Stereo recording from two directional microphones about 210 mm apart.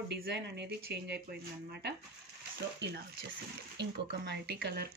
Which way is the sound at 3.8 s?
55° right (ahead or behind).